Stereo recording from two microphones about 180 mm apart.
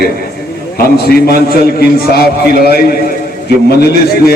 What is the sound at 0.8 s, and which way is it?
A man's voice, 60° left (ahead or behind).